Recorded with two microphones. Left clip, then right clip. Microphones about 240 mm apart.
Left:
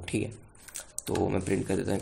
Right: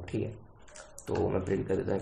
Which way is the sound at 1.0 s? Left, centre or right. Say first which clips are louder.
Left 1 dB; left.